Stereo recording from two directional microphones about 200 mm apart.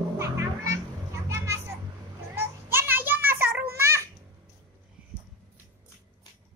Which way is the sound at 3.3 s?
10° right (ahead or behind).